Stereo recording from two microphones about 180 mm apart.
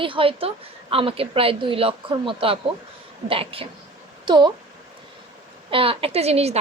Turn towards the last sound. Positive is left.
turn(degrees=-35)  # may be behind; listen again after turning